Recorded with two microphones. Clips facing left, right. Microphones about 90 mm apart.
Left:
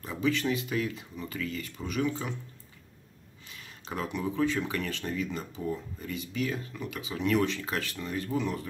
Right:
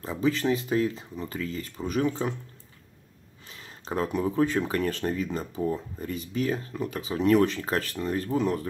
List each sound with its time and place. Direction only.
0.0 s speech: 30° right (ahead or behind)
3.4 s speech: 35° right (ahead or behind)